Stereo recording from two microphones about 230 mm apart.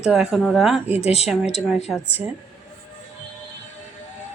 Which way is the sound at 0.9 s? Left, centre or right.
Left.